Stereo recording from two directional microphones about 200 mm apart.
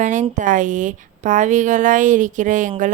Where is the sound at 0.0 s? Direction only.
40° right (ahead or behind).